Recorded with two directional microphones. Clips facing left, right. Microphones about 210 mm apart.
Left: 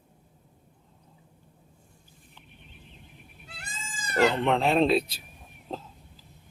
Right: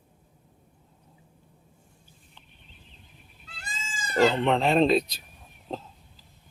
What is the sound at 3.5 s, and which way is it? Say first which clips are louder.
Goat: right 2 dB; 60° left (ahead or behind).